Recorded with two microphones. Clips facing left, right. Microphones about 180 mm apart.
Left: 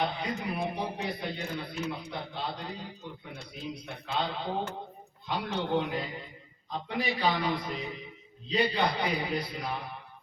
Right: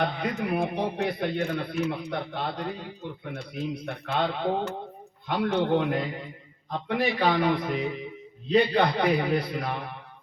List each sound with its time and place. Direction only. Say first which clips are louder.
0.0 s a man's voice: right 4 dB; 55° right (ahead or behind)